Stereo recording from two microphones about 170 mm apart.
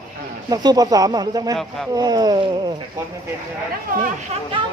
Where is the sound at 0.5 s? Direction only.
25° right (ahead or behind).